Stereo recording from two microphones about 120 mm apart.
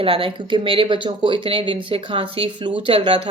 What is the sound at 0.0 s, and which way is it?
Speech, 50° right (ahead or behind).